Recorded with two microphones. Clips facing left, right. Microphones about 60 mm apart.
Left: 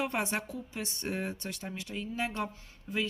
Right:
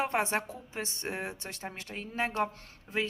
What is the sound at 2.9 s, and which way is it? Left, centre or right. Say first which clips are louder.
Speech: right 1 dB; right.